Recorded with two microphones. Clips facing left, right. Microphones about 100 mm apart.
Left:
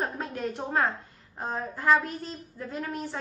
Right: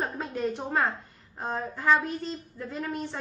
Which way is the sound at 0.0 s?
Centre (ahead or behind).